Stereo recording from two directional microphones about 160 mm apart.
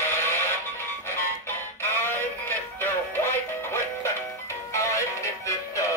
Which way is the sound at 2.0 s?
15° left (ahead or behind).